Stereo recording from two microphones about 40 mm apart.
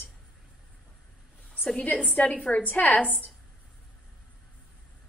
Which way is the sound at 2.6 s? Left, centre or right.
Left.